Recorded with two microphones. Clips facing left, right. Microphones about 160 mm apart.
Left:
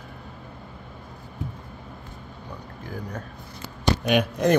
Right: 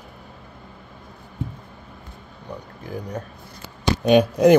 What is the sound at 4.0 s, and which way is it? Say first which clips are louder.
Speech: right 8 dB; 30° right (ahead or behind).